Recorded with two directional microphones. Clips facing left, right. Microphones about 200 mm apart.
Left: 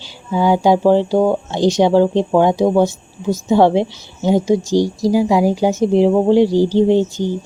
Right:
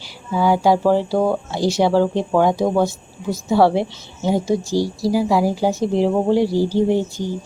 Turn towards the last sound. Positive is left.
turn(degrees=20)  # may be behind; listen again after turning